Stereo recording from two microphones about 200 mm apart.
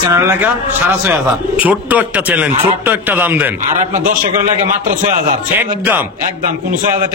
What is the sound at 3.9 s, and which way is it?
A man's voice, 40° right (ahead or behind).